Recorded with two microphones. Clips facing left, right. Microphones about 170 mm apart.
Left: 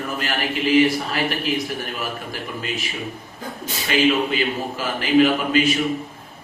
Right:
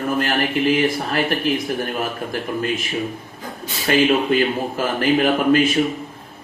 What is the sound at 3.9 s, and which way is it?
Speech, 50° right (ahead or behind).